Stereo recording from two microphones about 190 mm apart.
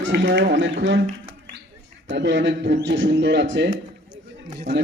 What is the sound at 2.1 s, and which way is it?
A man's voice, 70° right (ahead or behind).